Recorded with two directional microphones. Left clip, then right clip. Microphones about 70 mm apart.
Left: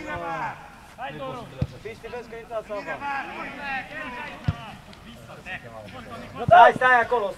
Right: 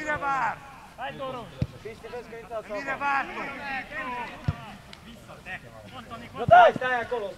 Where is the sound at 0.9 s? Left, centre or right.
Centre.